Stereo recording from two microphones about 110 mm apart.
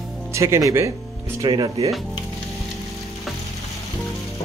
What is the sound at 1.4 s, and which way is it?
Speech, 40° right (ahead or behind).